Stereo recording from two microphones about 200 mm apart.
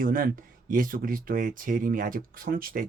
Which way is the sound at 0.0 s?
45° right (ahead or behind).